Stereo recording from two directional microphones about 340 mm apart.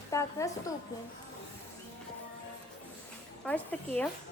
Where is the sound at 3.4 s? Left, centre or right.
Centre.